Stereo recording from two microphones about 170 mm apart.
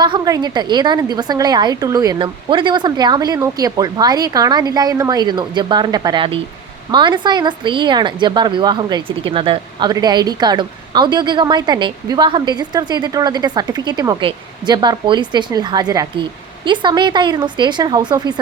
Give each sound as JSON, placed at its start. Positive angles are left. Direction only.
{"t": 0.0, "sound": "a woman's voice", "side_deg": -25}